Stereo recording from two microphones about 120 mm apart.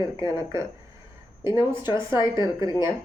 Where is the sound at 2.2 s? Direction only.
35° left (ahead or behind).